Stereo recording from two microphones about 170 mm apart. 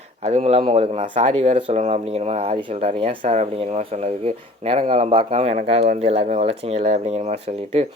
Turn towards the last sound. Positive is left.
turn(degrees=-40)  # may be behind; listen again after turning